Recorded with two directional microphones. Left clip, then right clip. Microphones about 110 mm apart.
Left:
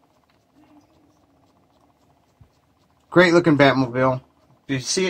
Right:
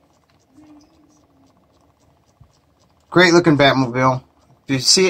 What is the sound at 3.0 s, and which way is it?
Speech, 5° right (ahead or behind).